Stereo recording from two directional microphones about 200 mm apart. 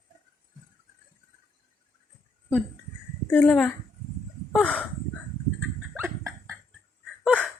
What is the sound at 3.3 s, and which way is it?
A woman's voice, 5° left (ahead or behind).